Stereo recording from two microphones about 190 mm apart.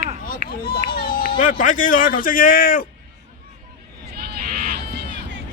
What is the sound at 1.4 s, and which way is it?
Speech, 45° left (ahead or behind).